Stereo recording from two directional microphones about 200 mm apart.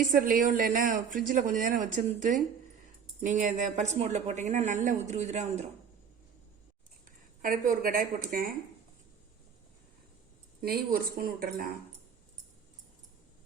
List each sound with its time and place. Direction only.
0.1 s a woman's voice: 45° right (ahead or behind)
7.4 s a woman's voice: 45° right (ahead or behind)
10.6 s a woman's voice: 50° right (ahead or behind)